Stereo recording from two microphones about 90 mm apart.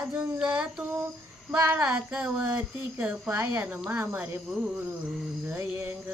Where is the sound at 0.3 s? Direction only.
10° right (ahead or behind).